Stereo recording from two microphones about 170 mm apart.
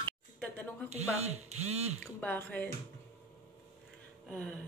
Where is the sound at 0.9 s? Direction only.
40° right (ahead or behind).